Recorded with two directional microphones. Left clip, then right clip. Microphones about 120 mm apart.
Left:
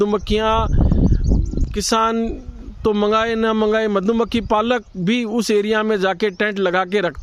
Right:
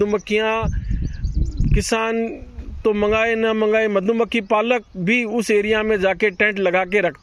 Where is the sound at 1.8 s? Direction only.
40° left (ahead or behind).